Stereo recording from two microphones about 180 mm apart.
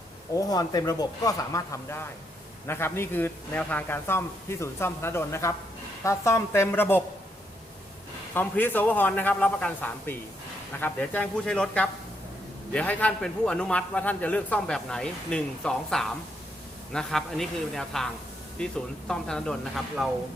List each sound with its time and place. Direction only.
0.3 s a man's voice: 20° left (ahead or behind)
8.3 s a man's voice: 10° left (ahead or behind)